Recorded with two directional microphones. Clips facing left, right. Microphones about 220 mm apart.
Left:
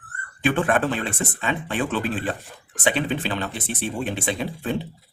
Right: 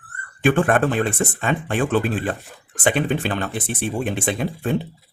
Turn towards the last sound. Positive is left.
turn(degrees=-50)  # may be behind; listen again after turning